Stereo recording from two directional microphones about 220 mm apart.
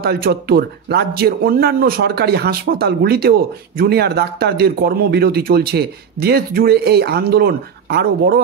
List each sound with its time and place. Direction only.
0.0 s speech: 45° right (ahead or behind)